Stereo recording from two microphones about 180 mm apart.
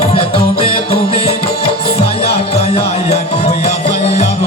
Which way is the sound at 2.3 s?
35° left (ahead or behind).